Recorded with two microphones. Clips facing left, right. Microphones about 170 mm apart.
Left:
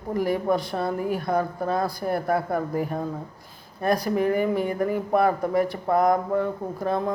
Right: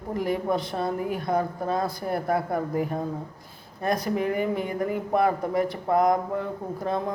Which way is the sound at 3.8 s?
20° right (ahead or behind).